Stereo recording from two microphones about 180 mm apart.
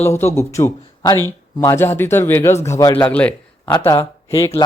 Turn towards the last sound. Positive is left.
turn(degrees=15)  # may be behind; listen again after turning